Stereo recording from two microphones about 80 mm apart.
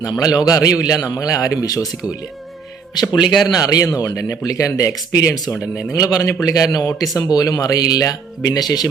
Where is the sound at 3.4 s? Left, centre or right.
Left.